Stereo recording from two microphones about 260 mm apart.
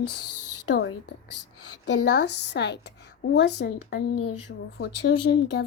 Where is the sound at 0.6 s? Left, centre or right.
Left.